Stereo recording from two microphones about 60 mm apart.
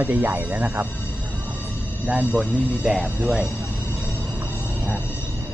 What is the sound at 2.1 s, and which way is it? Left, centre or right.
Speech, right.